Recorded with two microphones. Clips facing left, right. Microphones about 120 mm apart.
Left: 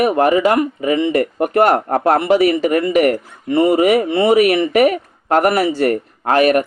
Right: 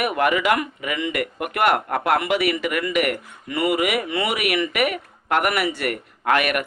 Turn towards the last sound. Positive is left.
turn(degrees=30)  # may be behind; listen again after turning